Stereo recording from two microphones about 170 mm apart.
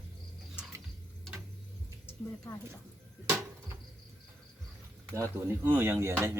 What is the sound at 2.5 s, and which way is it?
Speech, 15° left (ahead or behind).